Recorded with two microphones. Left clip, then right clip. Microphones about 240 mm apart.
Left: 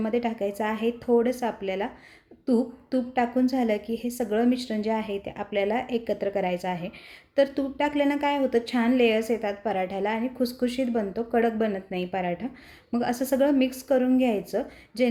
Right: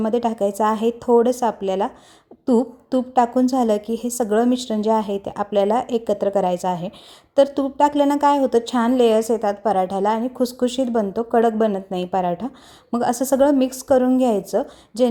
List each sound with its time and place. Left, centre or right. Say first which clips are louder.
0.0 s a woman's voice: right 7 dB; right